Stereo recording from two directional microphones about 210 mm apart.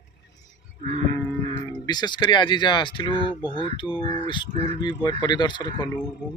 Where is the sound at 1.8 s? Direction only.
20° left (ahead or behind).